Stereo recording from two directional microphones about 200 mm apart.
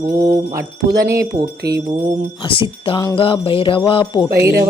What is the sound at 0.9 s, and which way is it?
Speech, 15° right (ahead or behind).